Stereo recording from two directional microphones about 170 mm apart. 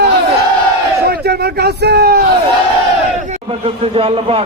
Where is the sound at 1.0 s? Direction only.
65° right (ahead or behind).